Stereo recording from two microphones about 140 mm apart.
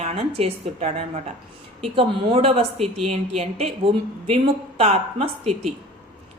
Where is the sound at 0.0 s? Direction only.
45° right (ahead or behind).